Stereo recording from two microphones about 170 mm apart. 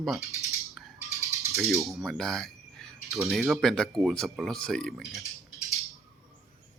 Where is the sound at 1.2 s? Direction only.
20° right (ahead or behind).